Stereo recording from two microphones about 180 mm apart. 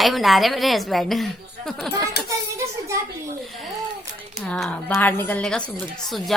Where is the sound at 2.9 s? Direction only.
15° right (ahead or behind).